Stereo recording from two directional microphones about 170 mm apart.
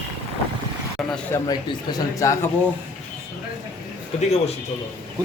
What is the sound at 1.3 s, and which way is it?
Speech, 25° left (ahead or behind).